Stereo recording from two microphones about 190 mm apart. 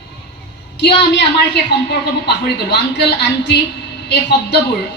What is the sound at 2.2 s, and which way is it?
A woman's voice, 60° left (ahead or behind).